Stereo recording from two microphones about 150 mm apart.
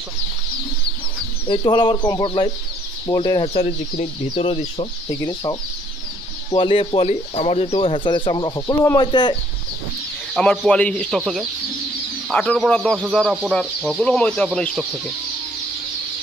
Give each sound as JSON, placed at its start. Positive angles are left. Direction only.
{"t": 1.5, "sound": "speech", "side_deg": 30}
{"t": 5.1, "sound": "speech", "side_deg": 20}
{"t": 6.5, "sound": "speech", "side_deg": 35}
{"t": 10.3, "sound": "speech", "side_deg": 5}